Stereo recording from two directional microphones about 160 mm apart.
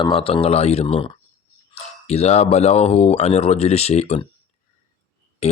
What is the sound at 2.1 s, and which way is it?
Speech, 40° left (ahead or behind).